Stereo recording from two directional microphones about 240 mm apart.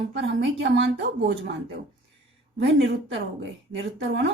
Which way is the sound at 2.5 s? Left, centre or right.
Right.